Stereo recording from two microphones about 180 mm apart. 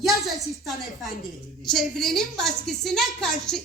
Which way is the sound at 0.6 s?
Centre (ahead or behind).